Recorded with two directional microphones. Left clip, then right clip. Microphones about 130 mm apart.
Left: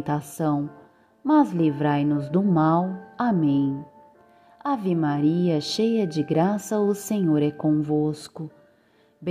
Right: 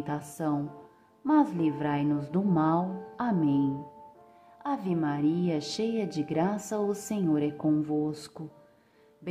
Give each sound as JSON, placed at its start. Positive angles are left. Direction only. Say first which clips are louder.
{"t": 0.0, "sound": "a woman's voice", "louder": "left 6 dB", "side_deg": 40}